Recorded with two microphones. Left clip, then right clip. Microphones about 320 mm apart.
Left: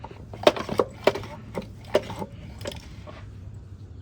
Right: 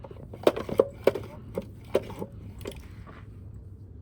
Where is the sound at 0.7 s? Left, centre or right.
Left.